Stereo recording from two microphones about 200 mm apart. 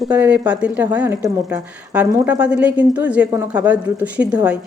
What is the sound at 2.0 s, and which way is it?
Speech, 15° right (ahead or behind).